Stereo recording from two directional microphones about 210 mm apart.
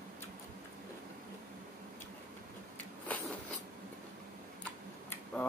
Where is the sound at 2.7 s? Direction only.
5° left (ahead or behind).